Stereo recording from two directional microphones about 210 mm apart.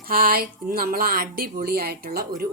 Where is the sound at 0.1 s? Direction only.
45° right (ahead or behind).